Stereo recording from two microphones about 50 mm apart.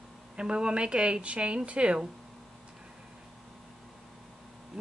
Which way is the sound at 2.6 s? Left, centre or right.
Centre.